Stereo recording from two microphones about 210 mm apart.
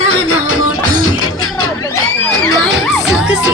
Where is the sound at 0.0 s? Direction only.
80° left.